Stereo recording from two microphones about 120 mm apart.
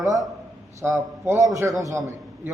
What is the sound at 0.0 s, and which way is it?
A man's voice, 30° right (ahead or behind).